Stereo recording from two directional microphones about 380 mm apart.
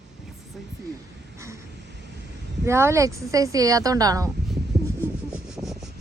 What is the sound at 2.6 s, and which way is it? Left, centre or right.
Speech, centre.